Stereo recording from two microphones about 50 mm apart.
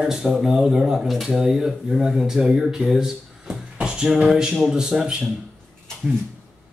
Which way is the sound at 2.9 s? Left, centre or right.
Centre.